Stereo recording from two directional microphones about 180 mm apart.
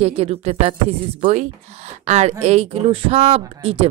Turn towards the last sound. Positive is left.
turn(degrees=-30)  # may be behind; listen again after turning